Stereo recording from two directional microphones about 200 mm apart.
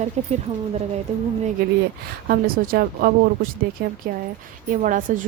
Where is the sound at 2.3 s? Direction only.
45° right (ahead or behind).